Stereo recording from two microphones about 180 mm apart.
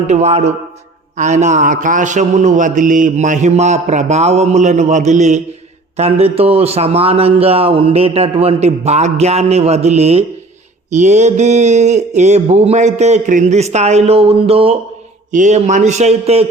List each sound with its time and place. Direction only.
0.1 s speech: 40° right (ahead or behind)